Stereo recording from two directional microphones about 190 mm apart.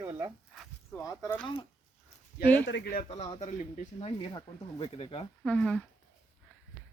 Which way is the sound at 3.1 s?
30° left (ahead or behind).